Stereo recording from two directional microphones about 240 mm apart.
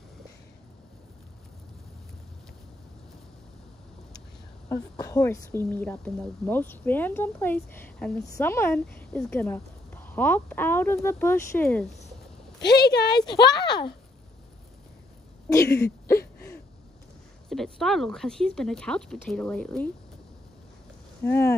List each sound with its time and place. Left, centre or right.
4.6 s speech: centre
12.6 s speech: left
13.0 s speech: centre
16.2 s a sound: left
17.5 s speech: centre
21.2 s speech: centre